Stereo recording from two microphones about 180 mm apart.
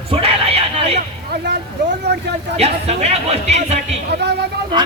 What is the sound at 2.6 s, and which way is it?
Speech, 35° right (ahead or behind).